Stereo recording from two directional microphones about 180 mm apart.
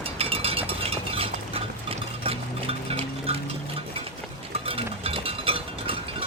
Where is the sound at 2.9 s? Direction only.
30° right (ahead or behind).